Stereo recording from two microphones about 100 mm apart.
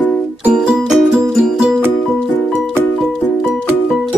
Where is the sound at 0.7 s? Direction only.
5° right (ahead or behind).